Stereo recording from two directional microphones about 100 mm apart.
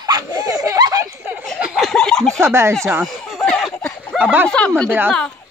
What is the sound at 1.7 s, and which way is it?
Speech, 5° left (ahead or behind).